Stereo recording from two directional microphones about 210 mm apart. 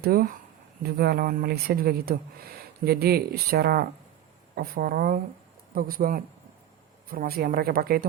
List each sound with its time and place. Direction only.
0.0 s speech: 45° right (ahead or behind)